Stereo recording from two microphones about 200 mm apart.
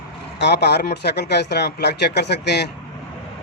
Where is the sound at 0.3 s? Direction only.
55° left (ahead or behind).